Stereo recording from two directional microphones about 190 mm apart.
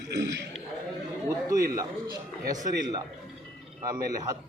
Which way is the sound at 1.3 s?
15° right (ahead or behind).